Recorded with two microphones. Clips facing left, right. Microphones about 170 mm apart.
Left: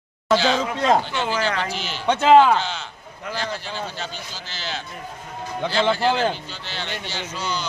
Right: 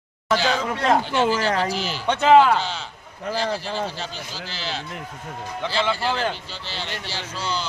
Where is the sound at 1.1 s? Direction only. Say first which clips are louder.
Right 3 dB; 40° right (ahead or behind).